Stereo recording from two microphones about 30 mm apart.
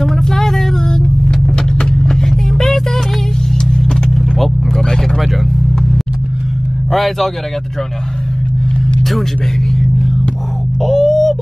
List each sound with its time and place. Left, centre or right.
0.0 s vehicle: centre; by 2.0 s left
2.0 s music: centre
3.5 s vehicle: left
4.1 s vehicle: centre
4.7 s vehicle: left
6.9 s a man's voice: centre
10.8 s a sound: centre